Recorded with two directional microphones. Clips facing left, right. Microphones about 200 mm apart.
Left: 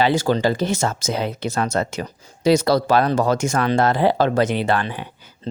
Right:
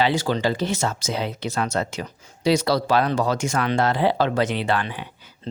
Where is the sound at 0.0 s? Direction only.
45° left (ahead or behind).